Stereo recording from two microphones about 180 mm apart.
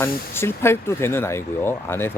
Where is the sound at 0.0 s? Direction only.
15° left (ahead or behind).